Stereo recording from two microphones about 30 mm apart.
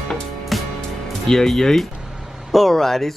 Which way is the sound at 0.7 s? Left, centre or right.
Centre.